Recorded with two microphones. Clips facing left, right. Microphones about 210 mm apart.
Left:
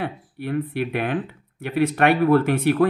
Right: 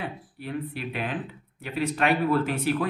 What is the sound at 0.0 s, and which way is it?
Speech, 60° left (ahead or behind).